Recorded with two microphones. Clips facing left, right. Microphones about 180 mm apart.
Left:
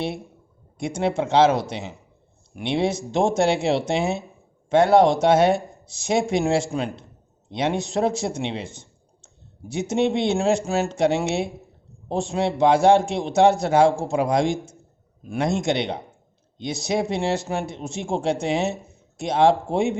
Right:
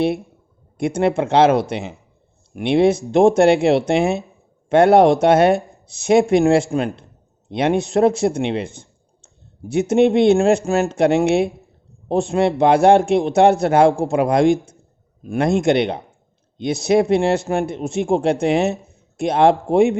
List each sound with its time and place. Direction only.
0.8 s speech: 60° right (ahead or behind)